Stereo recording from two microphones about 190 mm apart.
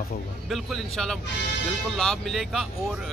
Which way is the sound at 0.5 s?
Centre (ahead or behind).